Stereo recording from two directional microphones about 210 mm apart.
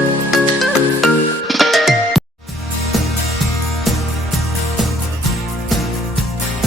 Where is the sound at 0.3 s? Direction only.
Centre (ahead or behind).